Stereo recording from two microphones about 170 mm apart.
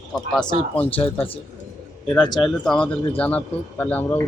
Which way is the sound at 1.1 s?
35° left (ahead or behind).